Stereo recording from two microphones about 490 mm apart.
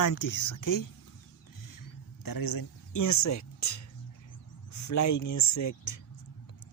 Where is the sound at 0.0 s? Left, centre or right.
Left.